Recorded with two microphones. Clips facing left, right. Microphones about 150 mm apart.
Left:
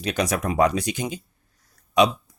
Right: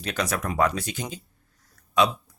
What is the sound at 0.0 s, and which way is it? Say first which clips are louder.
Speech: left 4 dB; 20° left (ahead or behind).